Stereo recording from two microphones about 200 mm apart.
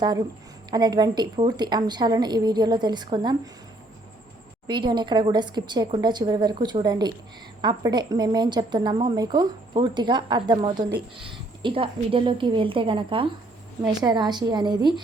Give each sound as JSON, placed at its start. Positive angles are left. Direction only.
{"t": 0.7, "sound": "a woman's voice", "side_deg": -20}
{"t": 4.6, "sound": "a woman's voice", "side_deg": -20}